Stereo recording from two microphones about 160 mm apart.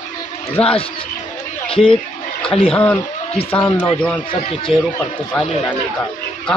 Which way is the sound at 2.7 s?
10° left (ahead or behind).